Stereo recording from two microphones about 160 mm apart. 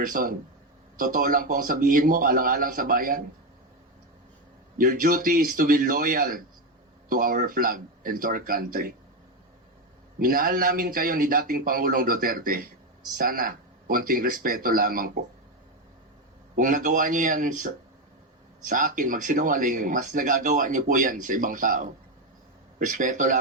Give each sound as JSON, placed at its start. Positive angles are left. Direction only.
{"t": 0.0, "sound": "speech", "side_deg": -60}
{"t": 4.8, "sound": "speech", "side_deg": -60}
{"t": 10.2, "sound": "speech", "side_deg": -60}
{"t": 16.6, "sound": "speech", "side_deg": -55}
{"t": 18.7, "sound": "speech", "side_deg": -55}